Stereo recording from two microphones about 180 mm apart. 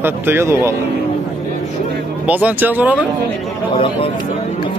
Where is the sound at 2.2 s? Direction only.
10° right (ahead or behind).